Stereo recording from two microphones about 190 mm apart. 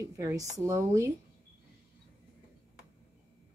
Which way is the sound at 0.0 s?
15° right (ahead or behind).